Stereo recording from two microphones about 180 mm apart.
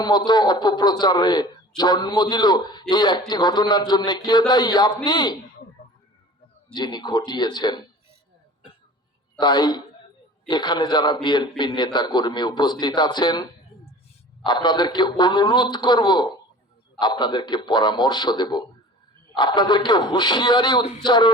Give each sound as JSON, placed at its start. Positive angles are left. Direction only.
{"t": 0.3, "sound": "a man's voice", "side_deg": 25}
{"t": 5.8, "sound": "a sound", "side_deg": 55}
{"t": 6.7, "sound": "a man's voice", "side_deg": 25}
{"t": 9.4, "sound": "a man's voice", "side_deg": 25}